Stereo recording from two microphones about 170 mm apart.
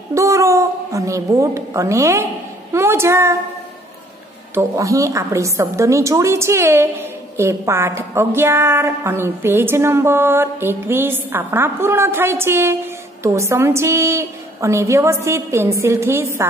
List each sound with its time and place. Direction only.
0.1 s cat: 15° right (ahead or behind)
2.7 s a woman's voice: 15° right (ahead or behind)
4.6 s a woman's voice: 20° right (ahead or behind)